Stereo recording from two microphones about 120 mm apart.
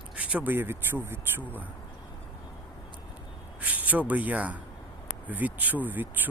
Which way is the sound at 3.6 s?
15° right (ahead or behind).